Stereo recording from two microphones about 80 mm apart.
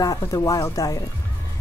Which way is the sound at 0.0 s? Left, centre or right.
Left.